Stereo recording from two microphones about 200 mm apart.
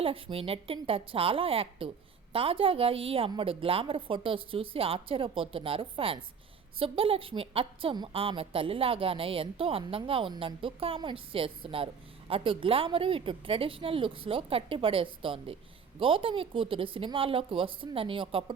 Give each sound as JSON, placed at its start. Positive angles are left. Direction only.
{"t": 0.0, "sound": "a woman's voice", "side_deg": -25}